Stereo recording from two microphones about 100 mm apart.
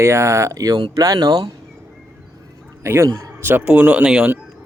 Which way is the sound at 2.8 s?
25° right (ahead or behind).